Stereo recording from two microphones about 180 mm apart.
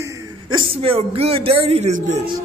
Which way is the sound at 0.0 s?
20° right (ahead or behind).